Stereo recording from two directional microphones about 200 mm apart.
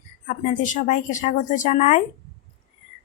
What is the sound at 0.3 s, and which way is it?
A woman's voice, 40° left (ahead or behind).